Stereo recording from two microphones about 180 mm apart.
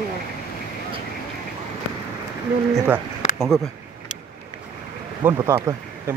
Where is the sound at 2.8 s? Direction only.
15° right (ahead or behind).